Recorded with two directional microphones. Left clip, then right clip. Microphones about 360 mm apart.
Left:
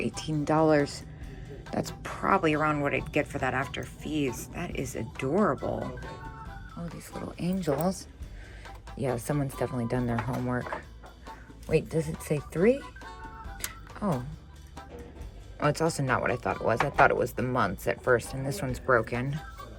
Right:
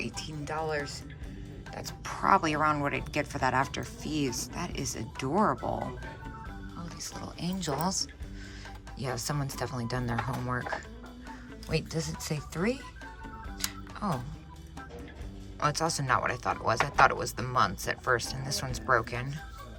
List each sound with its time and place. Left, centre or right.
0.0 s speech: centre
6.8 s speech: centre
9.0 s speech: centre
13.7 s music: centre
15.6 s speech: centre